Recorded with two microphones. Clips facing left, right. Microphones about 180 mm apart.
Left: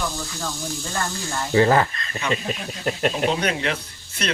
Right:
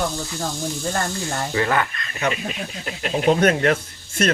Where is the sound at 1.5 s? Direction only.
30° left (ahead or behind).